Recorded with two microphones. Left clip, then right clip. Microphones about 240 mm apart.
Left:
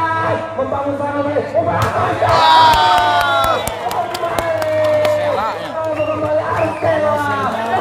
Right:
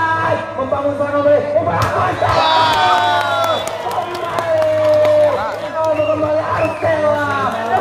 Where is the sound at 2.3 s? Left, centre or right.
Centre.